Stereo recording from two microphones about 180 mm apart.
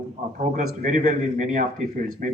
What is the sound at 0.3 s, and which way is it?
Speech, 45° right (ahead or behind).